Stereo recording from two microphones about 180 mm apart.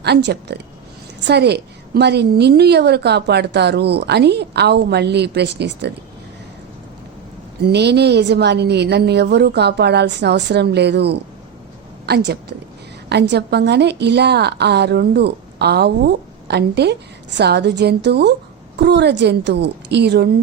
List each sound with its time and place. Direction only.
0.0 s a woman's voice: 70° right (ahead or behind)
7.6 s a woman's voice: 70° right (ahead or behind)